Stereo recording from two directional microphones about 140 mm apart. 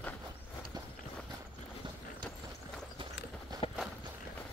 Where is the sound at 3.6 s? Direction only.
45° left (ahead or behind).